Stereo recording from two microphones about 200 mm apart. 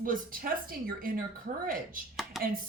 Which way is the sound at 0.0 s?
45° right (ahead or behind).